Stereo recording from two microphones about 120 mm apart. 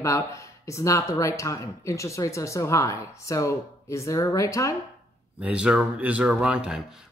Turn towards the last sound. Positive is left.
turn(degrees=-10)  # may be behind; listen again after turning